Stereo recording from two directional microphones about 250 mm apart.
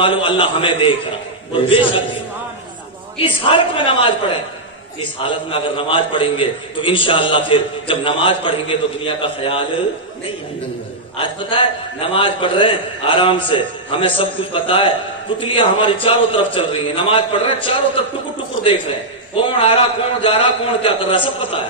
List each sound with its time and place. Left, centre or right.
0.0 s a man's voice: centre
3.2 s a man's voice: left
5.2 s a man's voice: left
12.1 s a man's voice: centre
19.3 s a man's voice: left